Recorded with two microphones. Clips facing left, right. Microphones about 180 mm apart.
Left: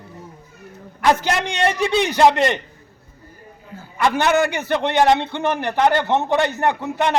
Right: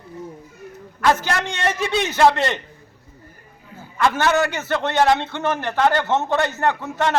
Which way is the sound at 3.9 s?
15° left (ahead or behind).